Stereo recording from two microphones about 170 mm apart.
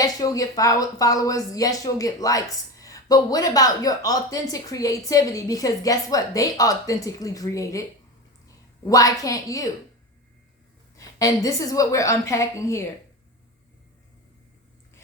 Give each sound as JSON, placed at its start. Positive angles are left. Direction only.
{"t": 0.0, "sound": "a woman's voice", "side_deg": 20}
{"t": 10.9, "sound": "speech", "side_deg": 20}